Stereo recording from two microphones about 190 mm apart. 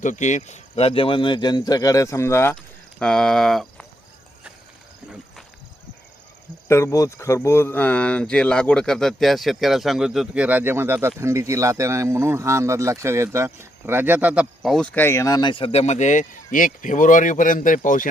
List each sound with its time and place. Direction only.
0.0 s speech: 40° left (ahead or behind); by 3.8 s centre (ahead or behind)
6.7 s speech: 15° left (ahead or behind); by 18.1 s 45° left (ahead or behind)